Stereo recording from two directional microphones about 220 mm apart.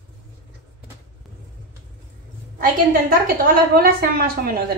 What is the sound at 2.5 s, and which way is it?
A woman's voice, 40° right (ahead or behind).